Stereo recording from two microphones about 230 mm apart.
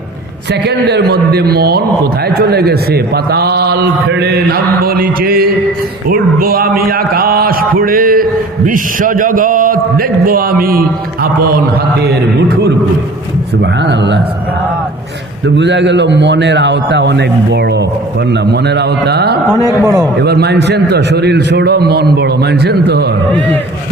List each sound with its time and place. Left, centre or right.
0.9 s a man's voice: right
15.4 s a man's voice: right
19.8 s a man's voice: centre
20.1 s a man's voice: right